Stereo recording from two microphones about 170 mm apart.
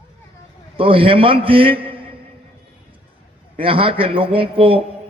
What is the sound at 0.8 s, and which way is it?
A man's voice, 30° right (ahead or behind).